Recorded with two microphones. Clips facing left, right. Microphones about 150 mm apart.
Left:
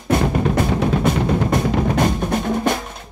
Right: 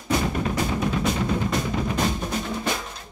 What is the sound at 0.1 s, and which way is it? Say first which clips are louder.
Drum: left 6 dB; 55° left (ahead or behind).